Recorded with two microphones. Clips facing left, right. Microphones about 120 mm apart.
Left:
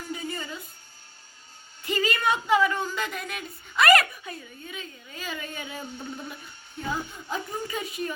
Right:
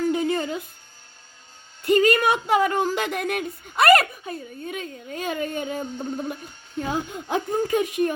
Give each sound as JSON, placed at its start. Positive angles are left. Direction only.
{"t": 0.1, "sound": "a sound", "side_deg": -70}
{"t": 1.8, "sound": "speech", "side_deg": -60}
{"t": 6.8, "sound": "speech", "side_deg": -70}
{"t": 7.5, "sound": "a woman's voice", "side_deg": -55}